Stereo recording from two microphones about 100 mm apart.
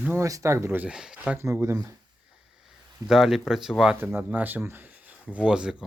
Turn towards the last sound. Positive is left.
turn(degrees=-10)  # may be behind; listen again after turning